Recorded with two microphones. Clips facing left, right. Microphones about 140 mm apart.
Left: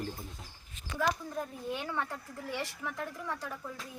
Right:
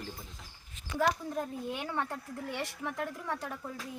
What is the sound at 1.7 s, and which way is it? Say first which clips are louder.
Speech: even; 15° right (ahead or behind).